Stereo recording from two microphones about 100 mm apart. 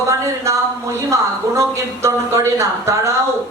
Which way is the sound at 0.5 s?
30° right (ahead or behind).